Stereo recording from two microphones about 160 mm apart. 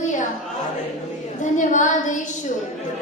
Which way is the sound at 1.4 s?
50° left (ahead or behind).